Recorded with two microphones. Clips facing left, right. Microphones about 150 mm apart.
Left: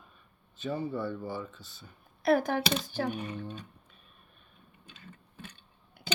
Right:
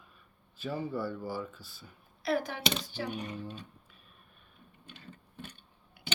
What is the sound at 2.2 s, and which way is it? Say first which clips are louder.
Speech: left 5 dB; 50° left (ahead or behind).